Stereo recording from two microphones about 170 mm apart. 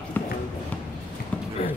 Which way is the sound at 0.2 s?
10° left (ahead or behind).